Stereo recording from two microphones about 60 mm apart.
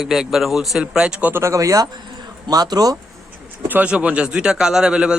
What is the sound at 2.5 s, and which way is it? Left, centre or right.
Speech, right.